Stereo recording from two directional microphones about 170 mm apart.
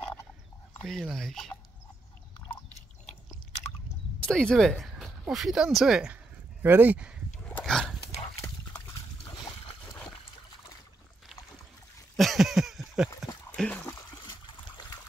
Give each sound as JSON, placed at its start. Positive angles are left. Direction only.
{"t": 0.8, "sound": "speech", "side_deg": 0}
{"t": 4.2, "sound": "speech", "side_deg": 5}
{"t": 7.4, "sound": "dog", "side_deg": 5}
{"t": 9.8, "sound": "trickle", "side_deg": 10}
{"t": 12.2, "sound": "a sound", "side_deg": 0}
{"t": 13.8, "sound": "trickle", "side_deg": 25}